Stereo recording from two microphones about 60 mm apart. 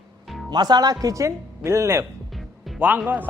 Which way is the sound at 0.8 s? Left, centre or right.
Right.